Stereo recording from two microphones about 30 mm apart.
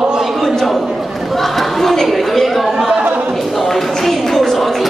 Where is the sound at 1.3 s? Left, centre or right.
Centre.